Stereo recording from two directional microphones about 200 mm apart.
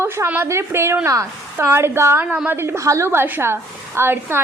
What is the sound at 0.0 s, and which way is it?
A woman's voice, 10° right (ahead or behind).